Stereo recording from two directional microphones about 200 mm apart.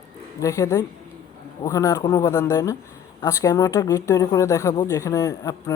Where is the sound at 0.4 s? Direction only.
15° left (ahead or behind).